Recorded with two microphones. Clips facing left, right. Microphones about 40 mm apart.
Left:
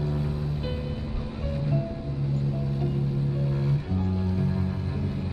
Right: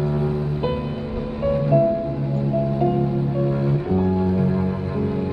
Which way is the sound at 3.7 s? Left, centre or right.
Centre.